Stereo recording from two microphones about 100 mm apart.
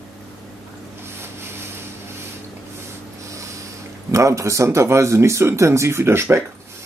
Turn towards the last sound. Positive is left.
turn(degrees=-25)  # may be behind; listen again after turning